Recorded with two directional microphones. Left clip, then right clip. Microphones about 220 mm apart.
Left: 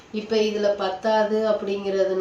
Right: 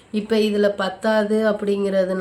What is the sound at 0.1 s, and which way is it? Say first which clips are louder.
Speech: right 2 dB; 40° right (ahead or behind).